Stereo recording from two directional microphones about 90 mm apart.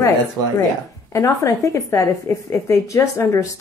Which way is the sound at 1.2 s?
35° left (ahead or behind).